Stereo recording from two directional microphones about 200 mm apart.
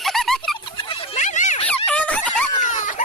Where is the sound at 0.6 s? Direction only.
25° left (ahead or behind).